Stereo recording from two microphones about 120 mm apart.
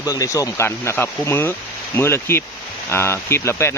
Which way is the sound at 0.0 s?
30° left (ahead or behind).